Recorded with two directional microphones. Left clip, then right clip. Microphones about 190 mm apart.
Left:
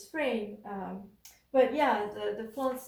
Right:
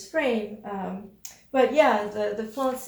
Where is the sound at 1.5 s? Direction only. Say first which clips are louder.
Right 6 dB; 45° right (ahead or behind).